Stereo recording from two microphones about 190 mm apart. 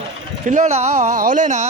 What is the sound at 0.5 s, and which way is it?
Speech, 40° right (ahead or behind).